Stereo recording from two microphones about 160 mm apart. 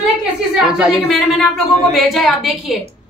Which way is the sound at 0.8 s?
Centre (ahead or behind).